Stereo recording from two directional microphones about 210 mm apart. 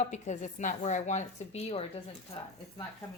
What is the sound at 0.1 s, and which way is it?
A woman's voice, 35° left (ahead or behind).